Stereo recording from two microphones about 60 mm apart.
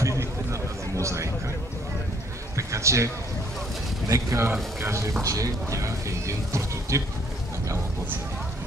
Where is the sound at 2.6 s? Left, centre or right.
Right.